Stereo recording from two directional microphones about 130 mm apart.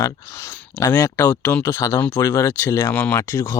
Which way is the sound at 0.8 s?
20° left (ahead or behind).